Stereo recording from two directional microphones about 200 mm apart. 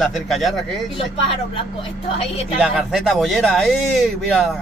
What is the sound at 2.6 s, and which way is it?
Speech, centre (ahead or behind).